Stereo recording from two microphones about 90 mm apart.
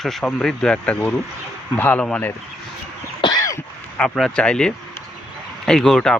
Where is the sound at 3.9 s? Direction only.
15° left (ahead or behind).